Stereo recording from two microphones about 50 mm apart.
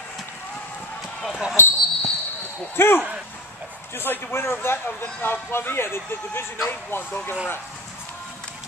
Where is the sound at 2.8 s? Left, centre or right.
Left.